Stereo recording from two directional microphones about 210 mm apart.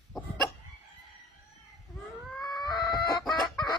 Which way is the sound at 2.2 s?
Centre (ahead or behind).